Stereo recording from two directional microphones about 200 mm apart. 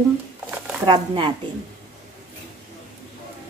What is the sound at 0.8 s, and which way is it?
Speech, 25° right (ahead or behind).